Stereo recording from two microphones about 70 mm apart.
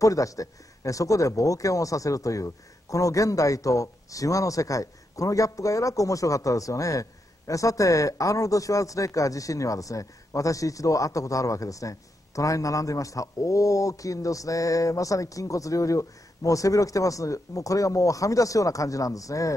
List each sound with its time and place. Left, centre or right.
0.0 s a man's voice: left